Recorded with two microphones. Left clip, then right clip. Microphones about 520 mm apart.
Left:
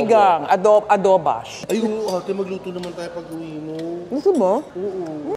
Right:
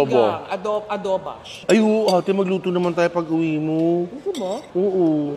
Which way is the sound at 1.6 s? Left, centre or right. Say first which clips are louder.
Right 6 dB; right.